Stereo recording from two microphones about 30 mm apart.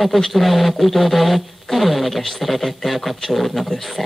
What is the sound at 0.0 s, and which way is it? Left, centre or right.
Speech, centre.